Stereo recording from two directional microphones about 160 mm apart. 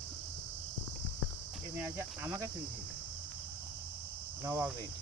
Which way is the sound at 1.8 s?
15° right (ahead or behind).